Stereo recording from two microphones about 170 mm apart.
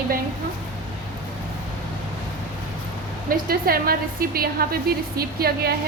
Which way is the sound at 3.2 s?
60° right (ahead or behind).